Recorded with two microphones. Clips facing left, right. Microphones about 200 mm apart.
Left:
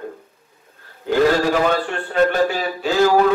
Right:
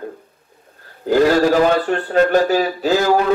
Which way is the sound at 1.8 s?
40° right (ahead or behind).